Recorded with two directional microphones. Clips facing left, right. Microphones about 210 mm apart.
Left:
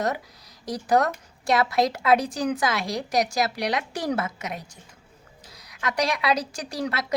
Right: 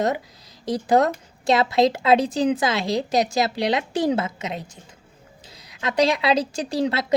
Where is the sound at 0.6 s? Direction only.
25° right (ahead or behind).